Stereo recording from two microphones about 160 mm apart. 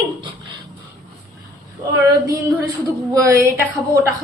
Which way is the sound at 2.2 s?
20° right (ahead or behind).